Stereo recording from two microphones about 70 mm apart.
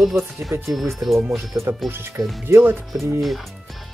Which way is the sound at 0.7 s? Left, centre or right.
Right.